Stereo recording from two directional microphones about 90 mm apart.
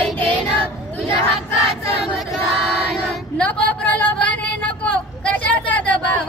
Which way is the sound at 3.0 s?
15° left (ahead or behind).